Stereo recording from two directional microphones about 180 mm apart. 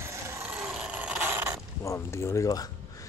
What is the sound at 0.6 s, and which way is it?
Mechanisms, 5° right (ahead or behind).